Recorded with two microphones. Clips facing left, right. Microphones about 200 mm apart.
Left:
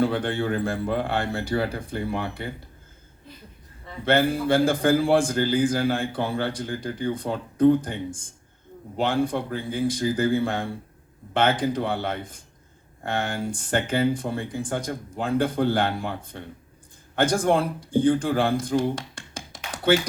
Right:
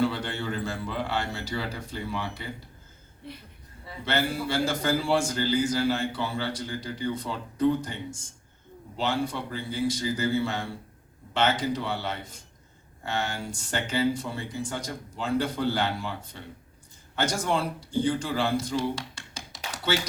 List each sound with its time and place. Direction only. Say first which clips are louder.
0.0 s a man's voice: left 4 dB; 55° left (ahead or behind)
3.2 s a woman's voice: right 5 dB; 70° right (ahead or behind)
4.0 s a man's voice: left 7 dB; 55° left (ahead or behind)